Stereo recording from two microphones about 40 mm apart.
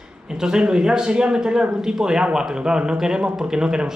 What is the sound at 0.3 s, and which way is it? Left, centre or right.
Speech, centre.